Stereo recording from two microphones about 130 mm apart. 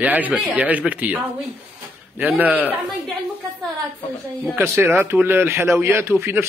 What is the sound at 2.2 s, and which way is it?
Speech, 10° right (ahead or behind).